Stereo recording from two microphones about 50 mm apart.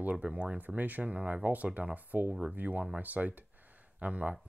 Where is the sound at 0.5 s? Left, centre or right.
Right.